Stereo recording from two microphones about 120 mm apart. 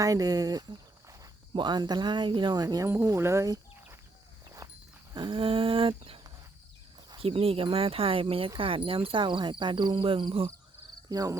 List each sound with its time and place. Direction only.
0.0 s speech: 30° right (ahead or behind)
4.4 s walk: 35° right (ahead or behind)
5.1 s speech: 45° right (ahead or behind)
11.1 s speech: 30° right (ahead or behind)